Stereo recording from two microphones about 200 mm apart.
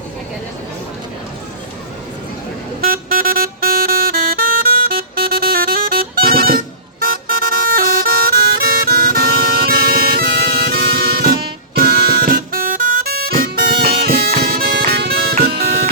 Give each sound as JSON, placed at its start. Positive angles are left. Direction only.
{"t": 2.8, "sound": "music", "side_deg": -45}
{"t": 13.8, "sound": "harmonica", "side_deg": -50}